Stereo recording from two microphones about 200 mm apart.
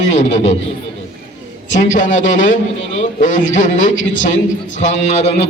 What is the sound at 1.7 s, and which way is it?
A man's voice, 40° left (ahead or behind).